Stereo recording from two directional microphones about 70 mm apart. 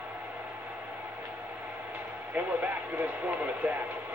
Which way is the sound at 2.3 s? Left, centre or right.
Right.